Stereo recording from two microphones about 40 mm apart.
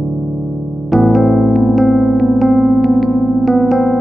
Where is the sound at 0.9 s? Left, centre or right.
Centre.